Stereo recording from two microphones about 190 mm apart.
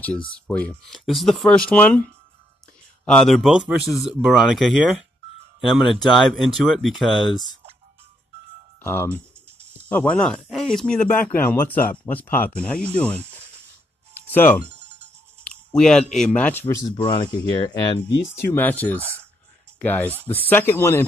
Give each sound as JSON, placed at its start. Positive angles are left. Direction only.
{"t": 0.5, "sound": "speech", "side_deg": 5}
{"t": 3.1, "sound": "speech", "side_deg": 0}
{"t": 8.8, "sound": "speech", "side_deg": 10}
{"t": 14.3, "sound": "speech", "side_deg": 10}
{"t": 14.8, "sound": "music", "side_deg": -35}
{"t": 15.4, "sound": "speech", "side_deg": 5}
{"t": 16.9, "sound": "speech", "side_deg": 25}
{"t": 18.4, "sound": "speech", "side_deg": 10}